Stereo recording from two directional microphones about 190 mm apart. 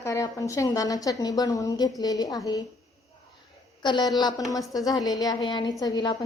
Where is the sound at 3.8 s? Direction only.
25° left (ahead or behind).